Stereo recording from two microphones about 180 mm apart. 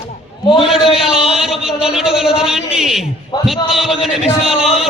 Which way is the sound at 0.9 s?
Centre (ahead or behind).